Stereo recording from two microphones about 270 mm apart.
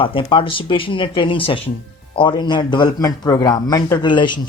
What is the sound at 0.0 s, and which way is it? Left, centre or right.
Speech, centre.